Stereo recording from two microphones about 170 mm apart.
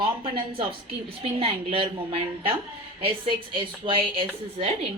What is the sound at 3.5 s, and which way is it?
Speech, 30° right (ahead or behind).